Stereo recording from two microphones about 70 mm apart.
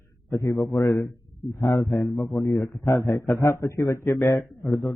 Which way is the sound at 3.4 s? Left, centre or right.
Left.